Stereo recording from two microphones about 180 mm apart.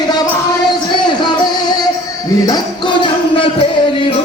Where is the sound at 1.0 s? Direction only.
25° left (ahead or behind).